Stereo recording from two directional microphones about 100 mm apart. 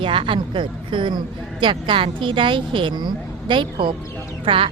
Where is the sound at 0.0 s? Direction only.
60° right (ahead or behind).